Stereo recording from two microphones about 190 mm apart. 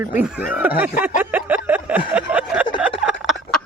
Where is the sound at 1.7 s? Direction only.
10° right (ahead or behind).